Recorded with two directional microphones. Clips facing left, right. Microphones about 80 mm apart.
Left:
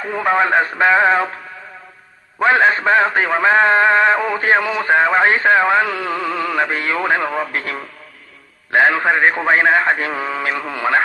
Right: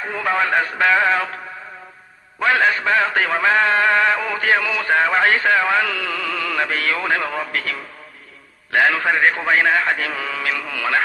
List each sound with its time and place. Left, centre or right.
0.1 s a man's voice: left
2.4 s a man's voice: left